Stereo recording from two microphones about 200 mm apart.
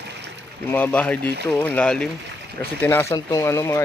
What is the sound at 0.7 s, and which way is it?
Speech, 5° left (ahead or behind).